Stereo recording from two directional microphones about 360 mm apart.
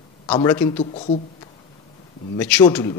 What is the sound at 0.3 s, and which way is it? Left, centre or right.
Speech, centre.